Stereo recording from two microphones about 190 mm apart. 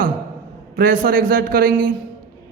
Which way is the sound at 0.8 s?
50° right (ahead or behind).